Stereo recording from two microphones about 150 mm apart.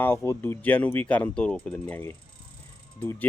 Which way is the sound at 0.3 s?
15° left (ahead or behind).